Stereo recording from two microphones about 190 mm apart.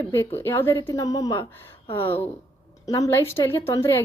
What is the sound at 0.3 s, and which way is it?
Speech, 10° left (ahead or behind).